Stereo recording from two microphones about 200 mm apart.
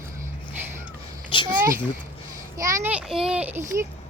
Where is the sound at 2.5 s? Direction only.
15° right (ahead or behind).